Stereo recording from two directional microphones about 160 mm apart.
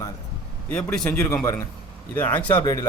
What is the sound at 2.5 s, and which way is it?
Speech, 25° left (ahead or behind).